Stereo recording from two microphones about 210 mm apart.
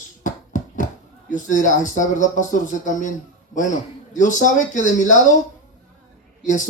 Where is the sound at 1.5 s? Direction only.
40° left (ahead or behind).